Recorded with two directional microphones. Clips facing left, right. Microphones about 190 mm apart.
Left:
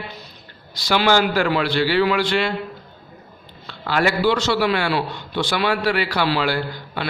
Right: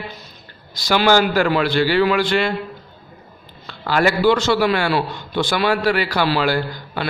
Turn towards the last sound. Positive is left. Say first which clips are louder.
# right 2 dB
turn(degrees=-45)  # may be behind; listen again after turning